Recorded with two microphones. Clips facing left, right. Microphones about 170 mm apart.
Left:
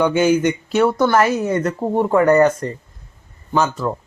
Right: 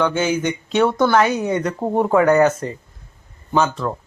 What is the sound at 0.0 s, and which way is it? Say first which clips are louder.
Speech: left 4 dB; 10° left (ahead or behind).